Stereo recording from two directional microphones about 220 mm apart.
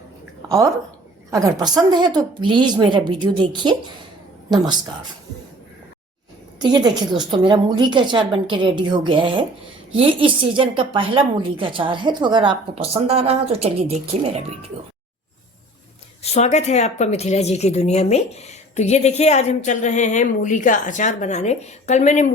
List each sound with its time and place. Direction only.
0.4 s a woman's voice: 15° right (ahead or behind)
6.6 s a woman's voice: 20° right (ahead or behind)
16.2 s a woman's voice: 30° left (ahead or behind)